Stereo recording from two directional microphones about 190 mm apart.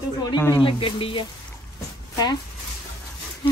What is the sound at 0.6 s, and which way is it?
Speech, 25° left (ahead or behind).